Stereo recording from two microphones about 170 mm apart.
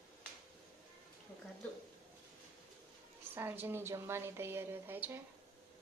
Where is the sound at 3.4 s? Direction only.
10° right (ahead or behind).